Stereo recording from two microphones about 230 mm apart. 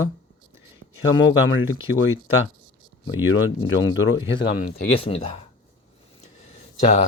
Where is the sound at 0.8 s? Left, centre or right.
Right.